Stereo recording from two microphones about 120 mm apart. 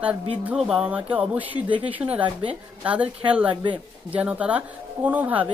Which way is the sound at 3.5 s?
40° right (ahead or behind).